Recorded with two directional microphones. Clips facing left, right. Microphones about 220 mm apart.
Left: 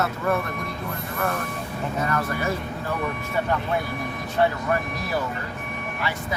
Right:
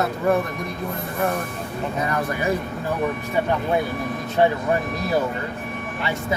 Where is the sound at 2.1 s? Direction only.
15° right (ahead or behind).